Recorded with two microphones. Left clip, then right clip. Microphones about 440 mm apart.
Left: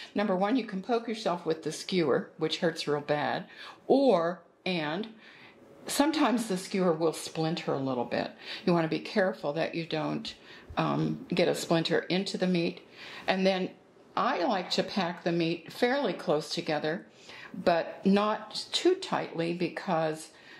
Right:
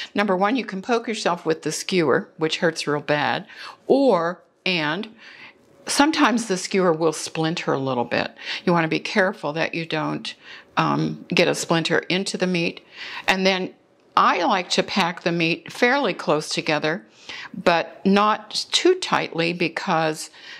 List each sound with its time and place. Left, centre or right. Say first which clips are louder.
0.0 s speech: right 8 dB; right